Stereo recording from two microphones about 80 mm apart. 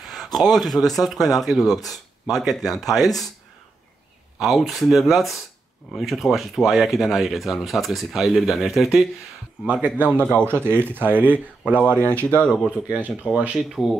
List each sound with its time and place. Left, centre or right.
0.0 s speech: centre
4.4 s speech: centre
9.7 s speech: right
11.8 s speech: centre
12.6 s speech: centre
13.6 s speech: centre